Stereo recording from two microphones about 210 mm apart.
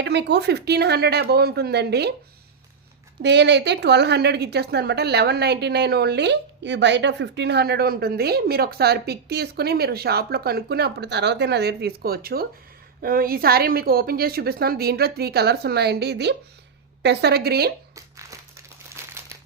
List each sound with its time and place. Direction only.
0.0 s a woman's voice: 55° right (ahead or behind)
3.2 s a woman's voice: 55° right (ahead or behind)
17.9 s crumpling: 15° right (ahead or behind)